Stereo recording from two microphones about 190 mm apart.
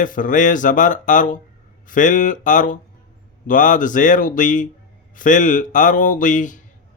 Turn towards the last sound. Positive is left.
turn(degrees=40)  # may be behind; listen again after turning